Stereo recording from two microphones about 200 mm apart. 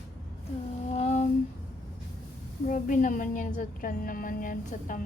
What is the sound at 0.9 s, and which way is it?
Humming, 35° left (ahead or behind).